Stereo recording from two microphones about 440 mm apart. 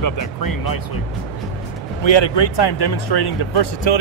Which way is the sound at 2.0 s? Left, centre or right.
Left.